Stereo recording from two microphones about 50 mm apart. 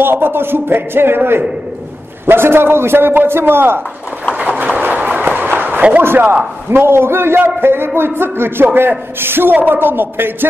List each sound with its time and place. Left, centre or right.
0.0 s a man's voice: right
4.4 s a sound: right
5.8 s speech: right
6.7 s a man's voice: right